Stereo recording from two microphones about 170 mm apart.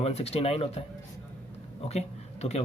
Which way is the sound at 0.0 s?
35° left (ahead or behind).